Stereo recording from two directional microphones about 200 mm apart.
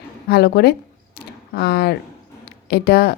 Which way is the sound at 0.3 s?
50° left (ahead or behind).